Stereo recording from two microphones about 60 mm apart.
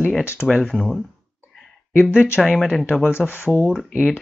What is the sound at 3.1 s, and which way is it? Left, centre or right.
Speech, left.